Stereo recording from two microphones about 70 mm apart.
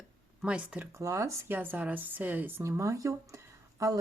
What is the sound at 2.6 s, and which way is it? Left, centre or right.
Speech, right.